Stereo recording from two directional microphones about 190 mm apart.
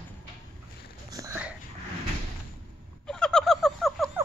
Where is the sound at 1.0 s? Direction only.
15° right (ahead or behind).